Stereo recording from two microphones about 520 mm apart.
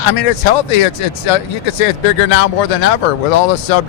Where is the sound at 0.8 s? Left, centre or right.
Left.